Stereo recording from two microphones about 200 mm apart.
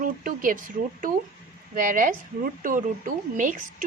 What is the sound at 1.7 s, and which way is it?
A woman's voice, 40° right (ahead or behind).